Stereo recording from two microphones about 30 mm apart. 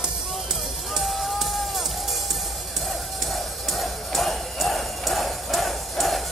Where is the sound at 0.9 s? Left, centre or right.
Centre.